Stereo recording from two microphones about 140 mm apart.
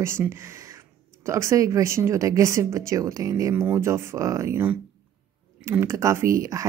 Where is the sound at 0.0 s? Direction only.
20° right (ahead or behind).